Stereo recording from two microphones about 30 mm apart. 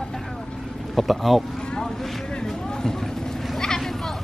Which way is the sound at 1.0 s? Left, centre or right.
Centre.